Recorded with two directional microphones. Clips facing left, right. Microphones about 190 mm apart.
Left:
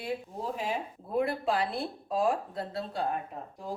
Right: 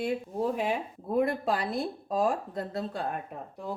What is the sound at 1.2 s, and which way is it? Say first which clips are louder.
Speech: right 1 dB; 45° right (ahead or behind).